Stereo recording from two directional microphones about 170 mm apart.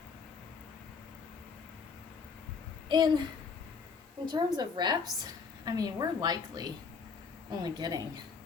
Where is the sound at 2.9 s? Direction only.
25° right (ahead or behind).